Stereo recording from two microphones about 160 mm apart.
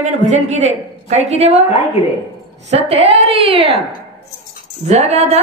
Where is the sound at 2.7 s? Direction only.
40° right (ahead or behind).